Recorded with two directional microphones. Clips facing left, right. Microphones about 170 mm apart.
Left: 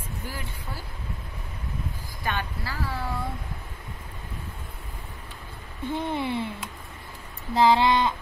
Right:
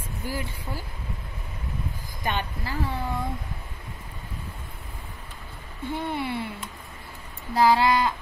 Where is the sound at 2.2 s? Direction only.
20° right (ahead or behind).